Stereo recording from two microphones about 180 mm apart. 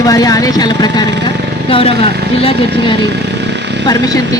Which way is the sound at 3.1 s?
70° right (ahead or behind).